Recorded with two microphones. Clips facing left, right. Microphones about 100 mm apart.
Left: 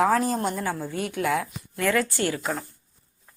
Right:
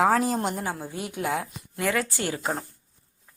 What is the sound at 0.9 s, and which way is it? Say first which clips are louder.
Speech: left 4 dB; 20° right (ahead or behind).